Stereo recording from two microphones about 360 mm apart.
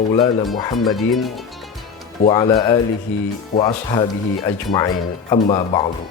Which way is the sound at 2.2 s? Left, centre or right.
Centre.